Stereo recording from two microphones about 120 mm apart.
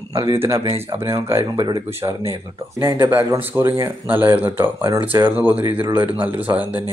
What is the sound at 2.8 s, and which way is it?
Speech, 15° right (ahead or behind).